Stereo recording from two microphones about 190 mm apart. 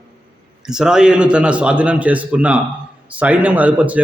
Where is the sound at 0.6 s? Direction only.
5° right (ahead or behind).